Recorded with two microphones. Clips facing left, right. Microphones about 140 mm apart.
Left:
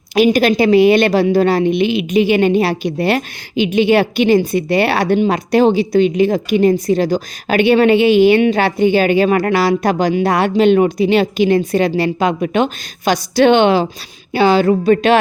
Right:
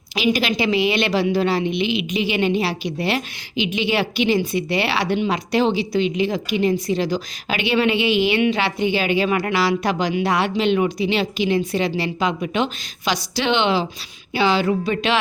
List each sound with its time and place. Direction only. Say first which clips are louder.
0.1 s a woman's voice: left 9 dB; 50° left (ahead or behind)